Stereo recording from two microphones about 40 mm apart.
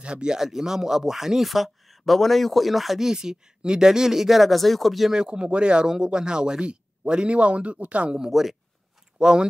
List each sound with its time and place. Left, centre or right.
0.0 s speech: right
0.4 s speech: centre
3.0 s speech: centre
5.1 s speech: right
8.2 s speech: centre
9.2 s speech: right